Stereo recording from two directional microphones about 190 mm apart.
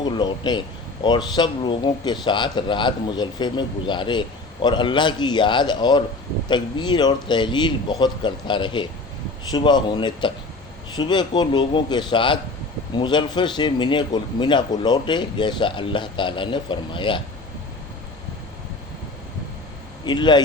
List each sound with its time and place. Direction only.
0.0 s speech: 25° left (ahead or behind)
20.1 s speech: 25° left (ahead or behind)